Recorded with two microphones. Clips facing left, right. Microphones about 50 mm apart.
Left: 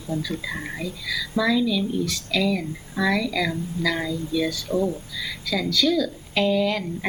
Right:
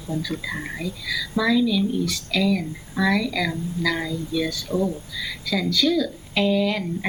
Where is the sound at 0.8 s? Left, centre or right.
Centre.